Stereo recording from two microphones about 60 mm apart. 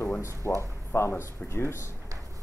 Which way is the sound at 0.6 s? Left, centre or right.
Left.